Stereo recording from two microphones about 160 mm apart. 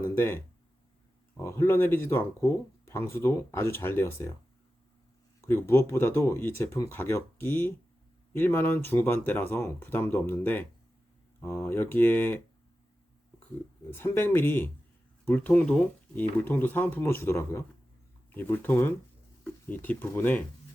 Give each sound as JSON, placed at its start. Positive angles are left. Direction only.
{"t": 0.2, "sound": "speech", "side_deg": 15}
{"t": 5.4, "sound": "speech", "side_deg": 15}
{"t": 13.9, "sound": "speech", "side_deg": 15}